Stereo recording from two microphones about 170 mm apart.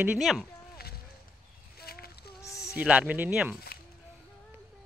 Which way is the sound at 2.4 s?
20° left (ahead or behind).